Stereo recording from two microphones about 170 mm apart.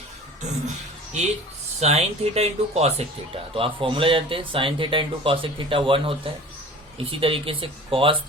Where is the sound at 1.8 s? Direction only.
40° right (ahead or behind).